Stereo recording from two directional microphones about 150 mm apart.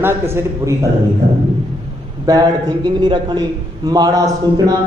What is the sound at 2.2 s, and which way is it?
A man's voice, 25° right (ahead or behind).